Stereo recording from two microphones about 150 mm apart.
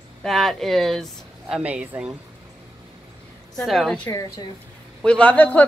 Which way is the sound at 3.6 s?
Centre (ahead or behind).